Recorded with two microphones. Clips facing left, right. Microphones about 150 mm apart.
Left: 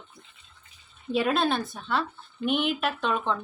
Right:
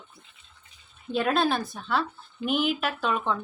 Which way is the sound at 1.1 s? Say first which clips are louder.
Even; centre (ahead or behind).